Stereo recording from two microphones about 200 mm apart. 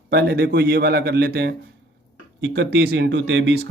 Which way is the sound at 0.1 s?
55° right (ahead or behind).